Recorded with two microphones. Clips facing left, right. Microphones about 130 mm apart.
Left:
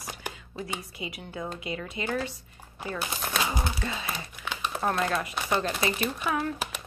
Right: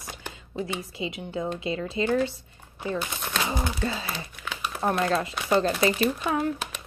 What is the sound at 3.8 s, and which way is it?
A woman's voice, 30° right (ahead or behind).